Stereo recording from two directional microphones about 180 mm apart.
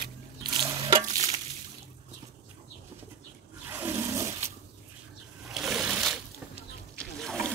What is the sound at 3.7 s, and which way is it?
Toilet flush, 15° right (ahead or behind).